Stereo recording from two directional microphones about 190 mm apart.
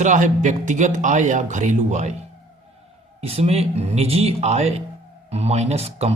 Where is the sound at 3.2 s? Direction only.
30° right (ahead or behind).